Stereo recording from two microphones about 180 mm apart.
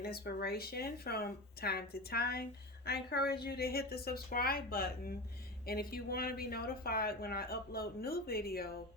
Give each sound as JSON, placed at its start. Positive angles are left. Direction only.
{"t": 0.0, "sound": "speech", "side_deg": 60}